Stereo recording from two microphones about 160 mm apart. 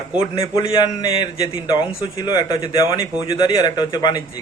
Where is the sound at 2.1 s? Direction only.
20° left (ahead or behind).